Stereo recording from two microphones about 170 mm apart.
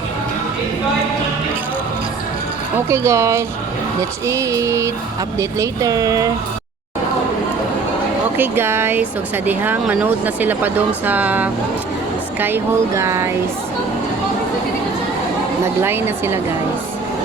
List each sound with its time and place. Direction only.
2.7 s speech: 15° right (ahead or behind)
8.4 s speech: 15° right (ahead or behind)
15.8 s speech: 15° right (ahead or behind)